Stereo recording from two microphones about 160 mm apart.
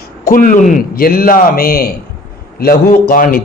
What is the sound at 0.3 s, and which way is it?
A man's voice, 60° left (ahead or behind).